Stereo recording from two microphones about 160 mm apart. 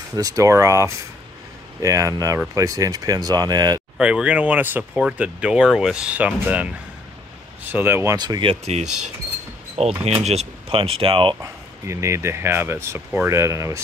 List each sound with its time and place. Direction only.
0.1 s speech: 20° right (ahead or behind)
4.0 s speech: 5° right (ahead or behind); by 11.3 s 35° right (ahead or behind)
11.4 s speech: 20° right (ahead or behind)